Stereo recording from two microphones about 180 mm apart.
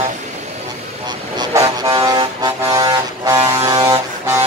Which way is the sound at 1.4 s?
20° right (ahead or behind).